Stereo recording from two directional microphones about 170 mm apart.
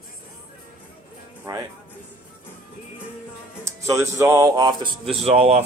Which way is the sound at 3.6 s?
15° right (ahead or behind).